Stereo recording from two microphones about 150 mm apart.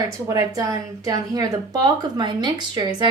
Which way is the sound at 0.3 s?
20° right (ahead or behind).